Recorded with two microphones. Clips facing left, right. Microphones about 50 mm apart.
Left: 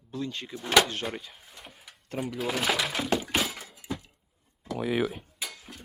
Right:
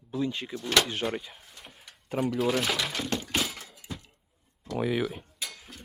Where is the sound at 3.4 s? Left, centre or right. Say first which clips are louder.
Left 1 dB; centre.